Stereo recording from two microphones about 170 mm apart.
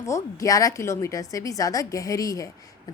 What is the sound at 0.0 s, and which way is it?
A woman's voice, 20° left (ahead or behind).